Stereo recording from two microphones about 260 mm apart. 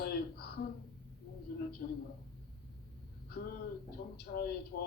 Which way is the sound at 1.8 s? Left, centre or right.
Left.